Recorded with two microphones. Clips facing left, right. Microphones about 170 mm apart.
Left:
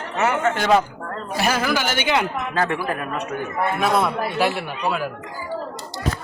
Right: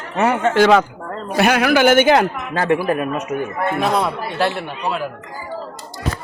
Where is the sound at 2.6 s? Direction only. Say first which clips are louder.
Right 7 dB; 20° right (ahead or behind).